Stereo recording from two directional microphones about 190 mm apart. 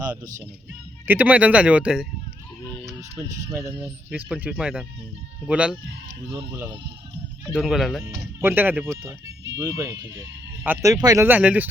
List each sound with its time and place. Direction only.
0.7 s speech: 10° right (ahead or behind)
2.8 s a sound: 15° right (ahead or behind)
3.2 s speech: 40° right (ahead or behind)
3.5 s speech: 5° right (ahead or behind)
7.5 s speech: 5° right (ahead or behind)
8.4 s speech: 10° right (ahead or behind)